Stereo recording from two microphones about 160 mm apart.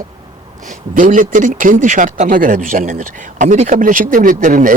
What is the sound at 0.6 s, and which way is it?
Speech, 55° right (ahead or behind).